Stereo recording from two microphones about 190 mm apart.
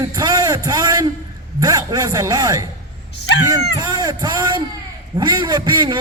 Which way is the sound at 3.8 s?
20° right (ahead or behind).